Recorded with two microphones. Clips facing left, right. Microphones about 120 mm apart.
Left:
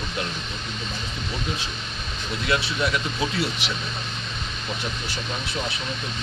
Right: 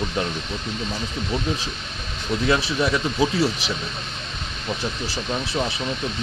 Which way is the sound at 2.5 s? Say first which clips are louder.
Right 3 dB; 35° right (ahead or behind).